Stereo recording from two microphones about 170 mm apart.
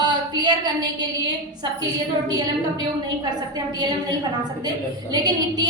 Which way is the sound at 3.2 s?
25° right (ahead or behind).